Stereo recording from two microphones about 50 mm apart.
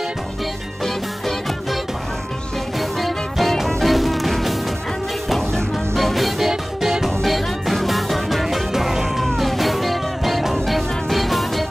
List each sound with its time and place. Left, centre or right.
0.8 s music: centre
2.8 s music: centre
5.9 s music: centre